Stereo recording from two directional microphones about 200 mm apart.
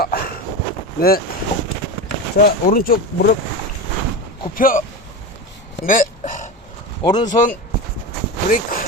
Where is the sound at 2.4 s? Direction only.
45° left (ahead or behind).